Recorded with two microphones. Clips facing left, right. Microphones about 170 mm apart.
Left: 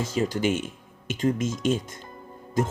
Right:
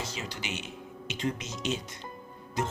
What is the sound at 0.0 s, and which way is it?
Speech, 45° left (ahead or behind).